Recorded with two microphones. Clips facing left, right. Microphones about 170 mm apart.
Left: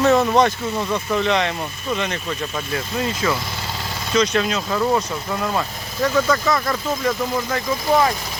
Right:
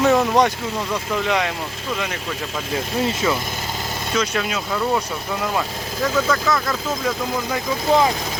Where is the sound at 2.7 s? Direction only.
25° right (ahead or behind).